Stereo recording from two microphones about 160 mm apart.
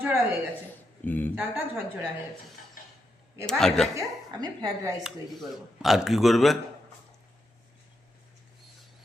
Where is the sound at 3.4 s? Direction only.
Centre (ahead or behind).